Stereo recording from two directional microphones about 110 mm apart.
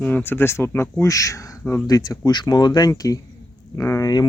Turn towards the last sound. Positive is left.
turn(degrees=35)  # may be behind; listen again after turning